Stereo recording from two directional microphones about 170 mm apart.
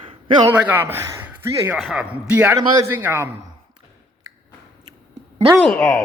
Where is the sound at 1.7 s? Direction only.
Centre (ahead or behind).